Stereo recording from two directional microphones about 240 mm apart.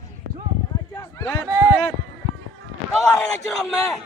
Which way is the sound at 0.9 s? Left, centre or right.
Centre.